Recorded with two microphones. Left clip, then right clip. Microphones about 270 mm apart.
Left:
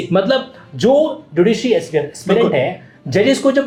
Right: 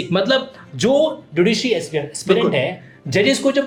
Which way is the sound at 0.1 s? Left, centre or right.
Centre.